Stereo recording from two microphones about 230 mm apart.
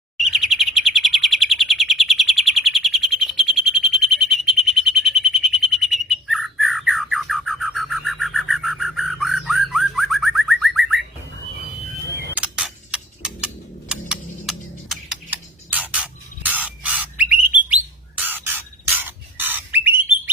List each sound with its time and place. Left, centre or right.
0.2 s chirp: centre
12.1 s tick-tock: centre
18.2 s bird: centre